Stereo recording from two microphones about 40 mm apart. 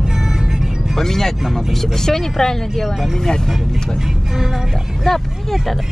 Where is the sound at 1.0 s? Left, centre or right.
Centre.